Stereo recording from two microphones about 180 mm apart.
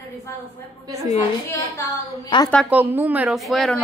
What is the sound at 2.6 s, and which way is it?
A woman's voice, 10° right (ahead or behind).